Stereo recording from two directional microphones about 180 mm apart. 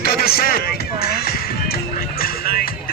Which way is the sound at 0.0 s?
55° left (ahead or behind).